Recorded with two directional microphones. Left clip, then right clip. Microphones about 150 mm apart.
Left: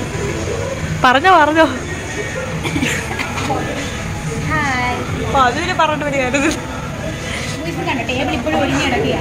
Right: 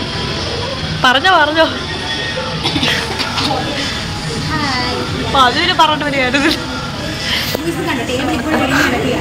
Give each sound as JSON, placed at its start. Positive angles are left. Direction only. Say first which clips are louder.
{"t": 1.0, "sound": "speech", "louder": "even", "side_deg": 25}
{"t": 5.3, "sound": "speech", "louder": "right 3 dB", "side_deg": 0}